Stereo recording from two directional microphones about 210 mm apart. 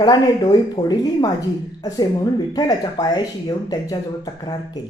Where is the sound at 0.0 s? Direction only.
20° left (ahead or behind).